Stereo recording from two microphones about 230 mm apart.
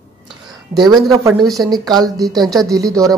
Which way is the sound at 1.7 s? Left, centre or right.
Centre.